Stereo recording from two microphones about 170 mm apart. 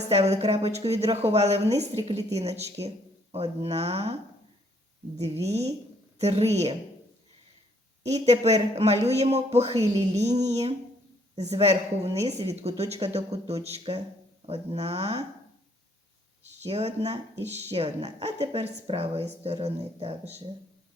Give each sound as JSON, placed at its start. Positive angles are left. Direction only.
{"t": 0.1, "sound": "speech", "side_deg": -40}
{"t": 8.0, "sound": "speech", "side_deg": -40}
{"t": 16.4, "sound": "speech", "side_deg": -40}